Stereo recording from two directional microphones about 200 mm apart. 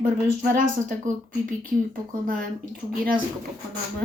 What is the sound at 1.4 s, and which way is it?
Speech, 45° right (ahead or behind).